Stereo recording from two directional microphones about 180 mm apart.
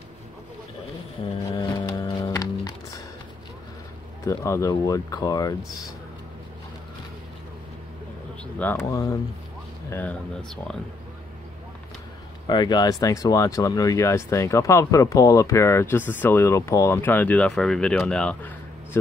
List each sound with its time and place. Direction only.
1.5 s a sound: 25° left (ahead or behind)
4.2 s speech: 15° left (ahead or behind)
8.5 s speech: 10° left (ahead or behind)
8.9 s speech: 20° left (ahead or behind)
9.8 s speech: 10° left (ahead or behind)
12.4 s speech: 25° left (ahead or behind); by 18.5 s 5° left (ahead or behind)